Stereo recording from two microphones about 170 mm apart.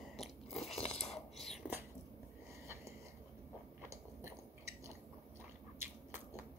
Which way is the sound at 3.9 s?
20° right (ahead or behind).